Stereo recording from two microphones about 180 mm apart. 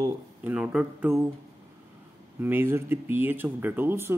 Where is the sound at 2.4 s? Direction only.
15° right (ahead or behind).